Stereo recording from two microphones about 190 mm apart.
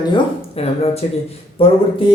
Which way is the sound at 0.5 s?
30° left (ahead or behind).